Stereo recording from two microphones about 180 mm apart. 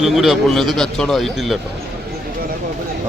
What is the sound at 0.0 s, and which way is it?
Speech, centre (ahead or behind).